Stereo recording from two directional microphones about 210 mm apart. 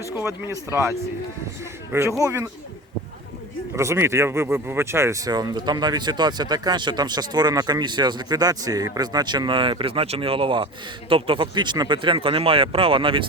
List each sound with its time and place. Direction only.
0.2 s speech: 10° right (ahead or behind)
3.8 s speech: 15° right (ahead or behind)